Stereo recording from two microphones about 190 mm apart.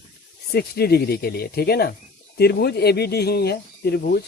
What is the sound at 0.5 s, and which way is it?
Speech, 55° left (ahead or behind).